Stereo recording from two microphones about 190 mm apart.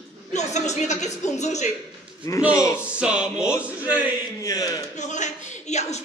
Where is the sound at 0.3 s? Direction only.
35° left (ahead or behind).